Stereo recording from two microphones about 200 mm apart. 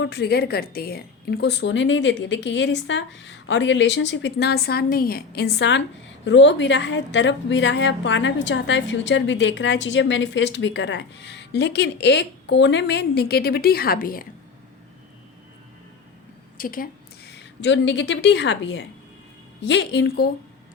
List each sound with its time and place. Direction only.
0.0 s a woman's voice: 55° left (ahead or behind)
16.6 s a woman's voice: 45° left (ahead or behind)